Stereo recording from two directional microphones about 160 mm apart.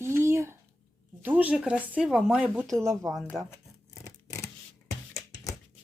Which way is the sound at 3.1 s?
Centre (ahead or behind).